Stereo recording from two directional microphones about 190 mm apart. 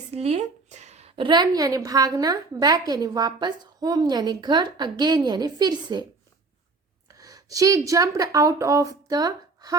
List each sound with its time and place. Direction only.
0.1 s a woman's voice: 35° right (ahead or behind)
7.1 s a woman's voice: 20° right (ahead or behind)